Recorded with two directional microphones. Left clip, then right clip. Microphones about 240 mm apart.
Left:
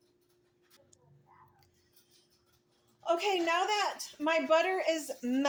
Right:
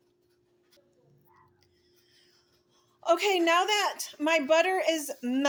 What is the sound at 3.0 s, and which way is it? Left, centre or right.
A woman's voice, right.